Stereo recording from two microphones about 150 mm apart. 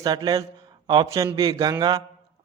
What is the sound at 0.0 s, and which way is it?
A man's voice, 25° right (ahead or behind).